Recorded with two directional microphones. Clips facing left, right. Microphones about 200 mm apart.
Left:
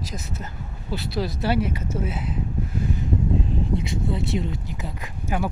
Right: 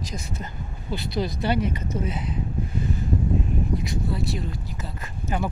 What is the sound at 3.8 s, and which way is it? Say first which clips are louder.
Speech: left 1 dB; 25° left (ahead or behind).